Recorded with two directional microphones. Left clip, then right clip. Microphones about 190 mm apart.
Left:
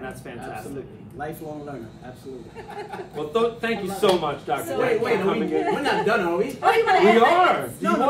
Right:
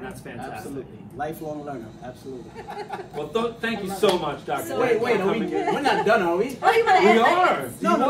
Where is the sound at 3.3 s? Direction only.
20° left (ahead or behind).